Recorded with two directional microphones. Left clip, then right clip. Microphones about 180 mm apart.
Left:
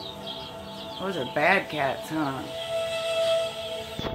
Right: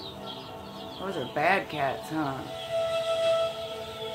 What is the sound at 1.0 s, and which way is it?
Speech, 40° left (ahead or behind).